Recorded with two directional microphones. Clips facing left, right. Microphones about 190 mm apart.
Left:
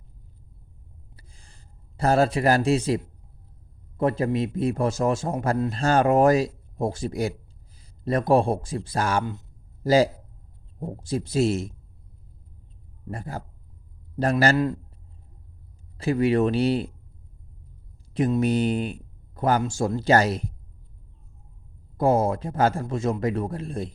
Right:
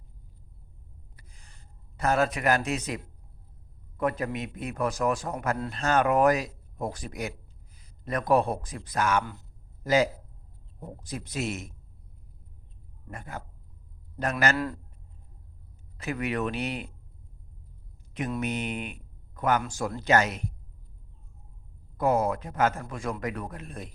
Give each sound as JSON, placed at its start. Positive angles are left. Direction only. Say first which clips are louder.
{"t": 1.1, "sound": "a sound", "louder": "left 3 dB", "side_deg": 30}
{"t": 3.9, "sound": "a man's voice", "louder": "left 6 dB", "side_deg": 30}
{"t": 13.1, "sound": "speech", "louder": "left 6 dB", "side_deg": 30}
{"t": 16.0, "sound": "speech", "louder": "left 9 dB", "side_deg": 30}
{"t": 18.1, "sound": "speech", "louder": "left 9 dB", "side_deg": 30}
{"t": 21.9, "sound": "a man's voice", "louder": "left 4 dB", "side_deg": 30}